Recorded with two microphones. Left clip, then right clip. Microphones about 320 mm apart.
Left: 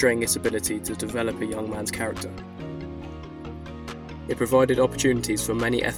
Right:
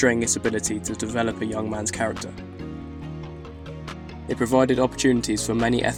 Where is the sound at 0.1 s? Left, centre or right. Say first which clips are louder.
Right 1 dB; left.